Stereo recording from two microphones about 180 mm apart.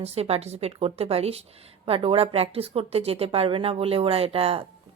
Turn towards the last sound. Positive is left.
turn(degrees=-30)  # may be behind; listen again after turning